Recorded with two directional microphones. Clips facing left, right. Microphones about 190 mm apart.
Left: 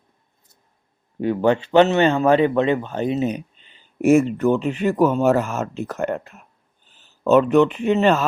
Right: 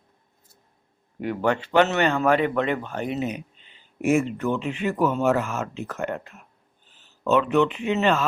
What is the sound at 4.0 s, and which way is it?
Speech, 40° left (ahead or behind).